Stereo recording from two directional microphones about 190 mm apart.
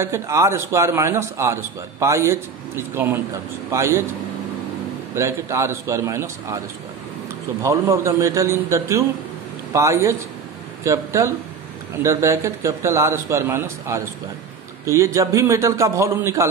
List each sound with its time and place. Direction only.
0.0 s a man's voice: 15° right (ahead or behind)
5.1 s a man's voice: 15° right (ahead or behind)
7.6 s a man's voice: 15° right (ahead or behind)